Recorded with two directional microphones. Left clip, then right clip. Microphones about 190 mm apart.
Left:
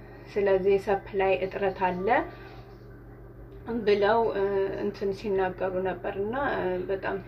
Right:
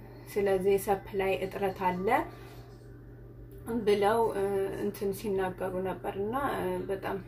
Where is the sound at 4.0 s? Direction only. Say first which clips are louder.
Left 4 dB; 15° right (ahead or behind).